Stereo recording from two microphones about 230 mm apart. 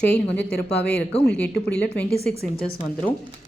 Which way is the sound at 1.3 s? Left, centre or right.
Centre.